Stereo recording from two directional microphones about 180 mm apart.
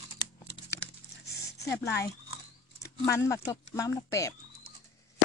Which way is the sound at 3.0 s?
15° left (ahead or behind).